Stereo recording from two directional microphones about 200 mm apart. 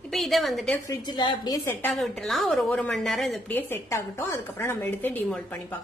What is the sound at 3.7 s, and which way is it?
Speech, 15° left (ahead or behind).